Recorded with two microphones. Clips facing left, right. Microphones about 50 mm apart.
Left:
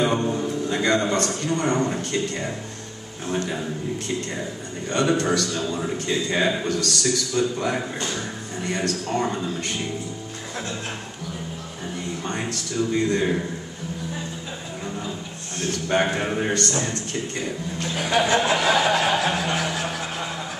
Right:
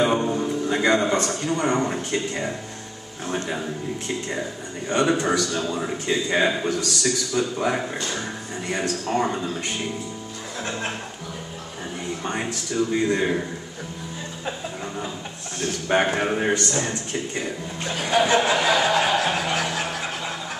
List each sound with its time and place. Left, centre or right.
0.0 s a man's voice: centre
4.3 s a man's voice: centre
12.3 s a man's voice: centre
15.9 s a man's voice: centre
18.2 s a sound: right
18.6 s a man's voice: centre
19.0 s snicker: centre